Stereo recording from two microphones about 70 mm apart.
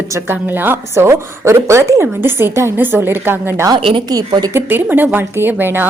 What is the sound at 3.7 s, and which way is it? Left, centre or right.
Speech, right.